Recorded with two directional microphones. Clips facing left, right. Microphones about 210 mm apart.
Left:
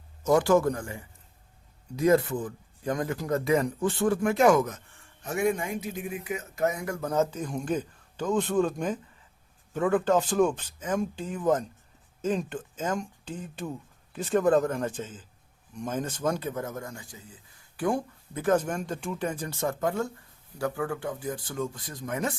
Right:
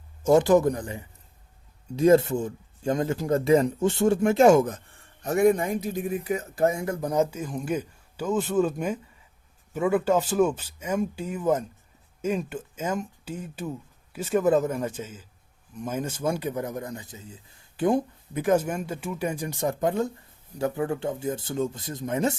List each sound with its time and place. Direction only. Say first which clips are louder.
0.2 s speech: right 3 dB; 25° right (ahead or behind)